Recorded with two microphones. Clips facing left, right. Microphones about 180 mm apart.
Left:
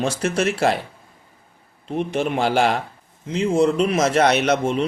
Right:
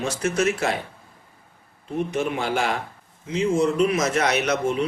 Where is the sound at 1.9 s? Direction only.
30° left (ahead or behind).